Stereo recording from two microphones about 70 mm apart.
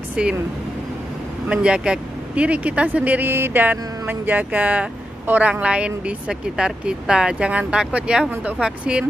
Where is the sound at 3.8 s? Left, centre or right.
Right.